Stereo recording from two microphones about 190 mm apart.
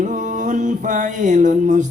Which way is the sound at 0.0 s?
40° right (ahead or behind).